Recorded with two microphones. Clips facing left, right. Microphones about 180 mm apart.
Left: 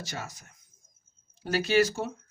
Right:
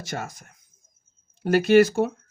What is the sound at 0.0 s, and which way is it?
Speech, 55° right (ahead or behind).